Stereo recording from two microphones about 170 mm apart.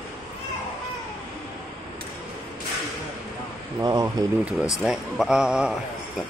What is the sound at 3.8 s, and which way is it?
Speech, 20° right (ahead or behind).